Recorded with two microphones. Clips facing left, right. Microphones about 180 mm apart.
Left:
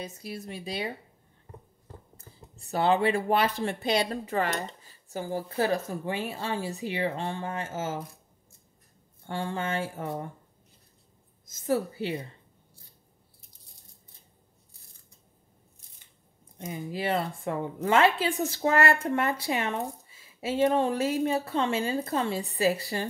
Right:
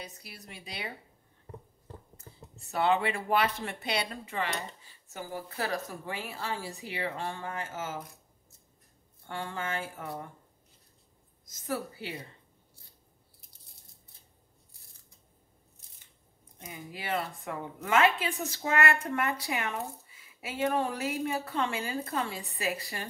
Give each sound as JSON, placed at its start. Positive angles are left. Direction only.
{"t": 0.0, "sound": "a woman's voice", "side_deg": 25}
{"t": 2.7, "sound": "a woman's voice", "side_deg": 35}
{"t": 9.3, "sound": "a woman's voice", "side_deg": 30}
{"t": 11.4, "sound": "a woman's voice", "side_deg": 25}
{"t": 16.6, "sound": "a woman's voice", "side_deg": 25}